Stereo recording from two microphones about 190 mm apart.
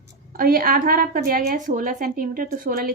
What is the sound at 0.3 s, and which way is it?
A woman's voice, 50° right (ahead or behind).